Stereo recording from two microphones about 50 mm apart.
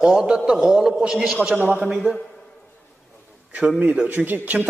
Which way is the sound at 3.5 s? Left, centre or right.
Right.